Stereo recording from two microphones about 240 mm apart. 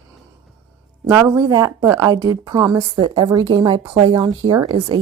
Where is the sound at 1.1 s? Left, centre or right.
Centre.